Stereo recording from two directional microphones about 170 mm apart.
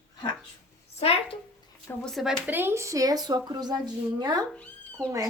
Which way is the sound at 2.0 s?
Centre (ahead or behind).